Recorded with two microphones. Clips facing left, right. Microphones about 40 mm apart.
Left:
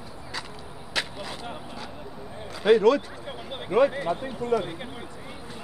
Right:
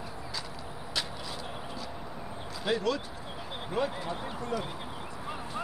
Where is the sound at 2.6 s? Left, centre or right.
Left.